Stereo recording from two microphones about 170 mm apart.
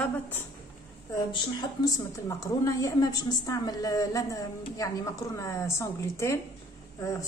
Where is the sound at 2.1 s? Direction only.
15° left (ahead or behind).